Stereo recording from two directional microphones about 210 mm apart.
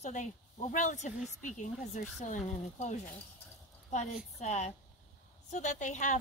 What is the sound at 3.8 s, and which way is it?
Speech, 35° left (ahead or behind).